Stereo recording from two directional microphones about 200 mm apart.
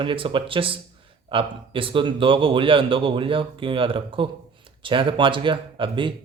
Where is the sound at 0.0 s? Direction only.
25° right (ahead or behind).